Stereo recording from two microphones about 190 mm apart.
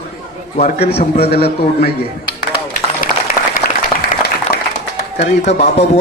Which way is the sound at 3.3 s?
50° left (ahead or behind).